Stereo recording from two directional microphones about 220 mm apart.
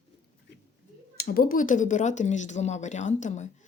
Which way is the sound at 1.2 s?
40° left (ahead or behind).